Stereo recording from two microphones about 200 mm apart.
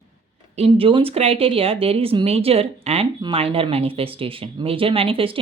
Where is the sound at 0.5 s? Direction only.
30° right (ahead or behind).